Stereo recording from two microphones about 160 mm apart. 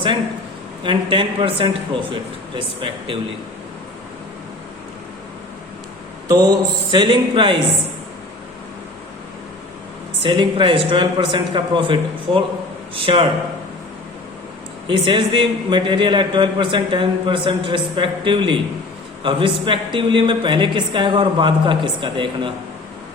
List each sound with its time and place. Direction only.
0.9 s a man's voice: 30° right (ahead or behind)
6.2 s speech: 25° right (ahead or behind)
10.2 s a man's voice: 30° right (ahead or behind)
14.8 s a man's voice: 35° right (ahead or behind)